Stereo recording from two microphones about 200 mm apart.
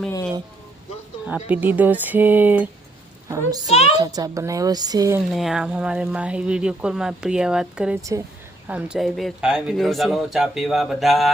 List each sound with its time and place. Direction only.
1.3 s a woman's voice: 10° right (ahead or behind)
5.3 s speech: centre (ahead or behind)